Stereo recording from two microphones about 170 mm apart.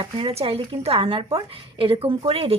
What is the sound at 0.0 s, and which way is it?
A woman's voice, 35° right (ahead or behind).